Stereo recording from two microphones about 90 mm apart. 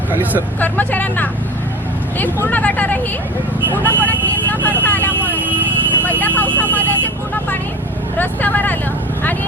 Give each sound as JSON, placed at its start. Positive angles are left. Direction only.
{"t": 0.1, "sound": "speech", "side_deg": -20}
{"t": 0.6, "sound": "speech", "side_deg": 20}
{"t": 3.8, "sound": "vehicle", "side_deg": 20}
{"t": 6.1, "sound": "speech", "side_deg": 20}
{"t": 8.2, "sound": "speech", "side_deg": 20}